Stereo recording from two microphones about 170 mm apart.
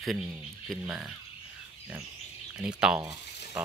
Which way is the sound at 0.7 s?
5° right (ahead or behind).